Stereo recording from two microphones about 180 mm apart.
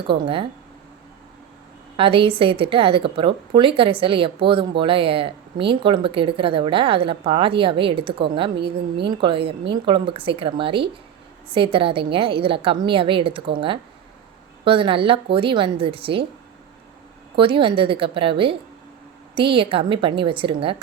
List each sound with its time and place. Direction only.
0.0 s speech: 30° right (ahead or behind)
2.0 s speech: 30° right (ahead or behind)
17.3 s speech: 30° right (ahead or behind)